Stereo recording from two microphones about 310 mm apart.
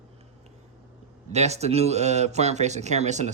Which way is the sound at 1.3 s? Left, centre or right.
Right.